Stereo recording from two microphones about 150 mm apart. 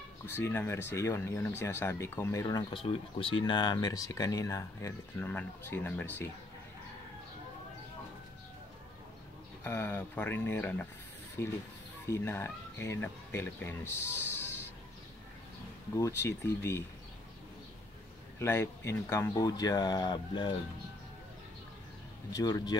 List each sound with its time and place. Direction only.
0.3 s speech: 15° left (ahead or behind)
2.8 s speech: 35° left (ahead or behind); by 6.2 s 15° left (ahead or behind)
9.6 s speech: 15° left (ahead or behind)
16.0 s speech: 20° left (ahead or behind)
18.4 s speech: 15° left (ahead or behind)
22.3 s speech: 25° left (ahead or behind)